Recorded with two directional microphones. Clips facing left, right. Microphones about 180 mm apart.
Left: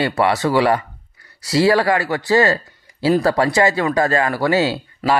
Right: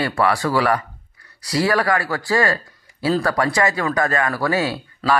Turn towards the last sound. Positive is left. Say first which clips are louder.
# left 2 dB
turn(degrees=25)  # may be behind; listen again after turning